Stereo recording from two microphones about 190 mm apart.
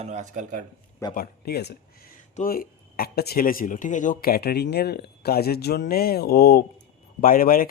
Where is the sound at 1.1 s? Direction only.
55° left (ahead or behind).